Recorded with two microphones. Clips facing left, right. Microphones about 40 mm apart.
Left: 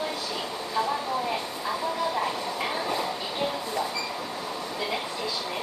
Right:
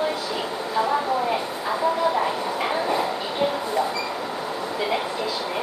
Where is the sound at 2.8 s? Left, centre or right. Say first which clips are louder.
Right 5 dB; centre.